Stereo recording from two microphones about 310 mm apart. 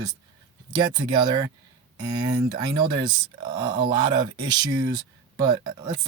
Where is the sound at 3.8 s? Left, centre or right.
Centre.